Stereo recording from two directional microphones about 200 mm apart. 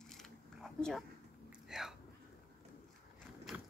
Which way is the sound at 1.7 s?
Centre (ahead or behind).